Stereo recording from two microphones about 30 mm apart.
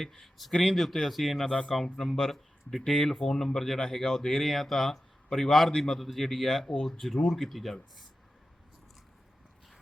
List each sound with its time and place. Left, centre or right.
0.0 s speech: centre
0.5 s speech: left
1.0 s speech: centre
4.9 s a sound: centre
5.5 s speech: centre
5.7 s a man's voice: centre
6.0 s speech: centre